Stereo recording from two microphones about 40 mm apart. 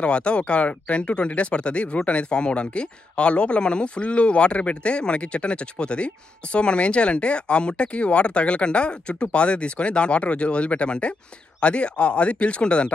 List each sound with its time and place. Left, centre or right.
0.0 s speech: left